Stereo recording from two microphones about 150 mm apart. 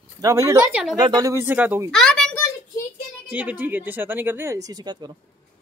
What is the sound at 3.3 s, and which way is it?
Speech, 10° right (ahead or behind).